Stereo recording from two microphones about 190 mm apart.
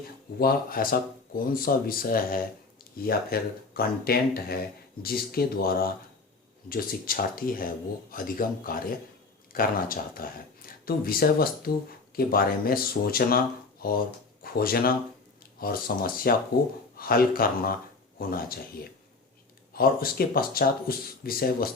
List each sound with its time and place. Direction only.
0.3 s speech: 50° left (ahead or behind)
19.7 s speech: 50° left (ahead or behind)